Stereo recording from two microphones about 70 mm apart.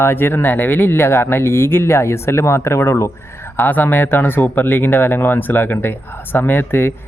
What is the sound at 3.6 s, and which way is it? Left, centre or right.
Speech, left.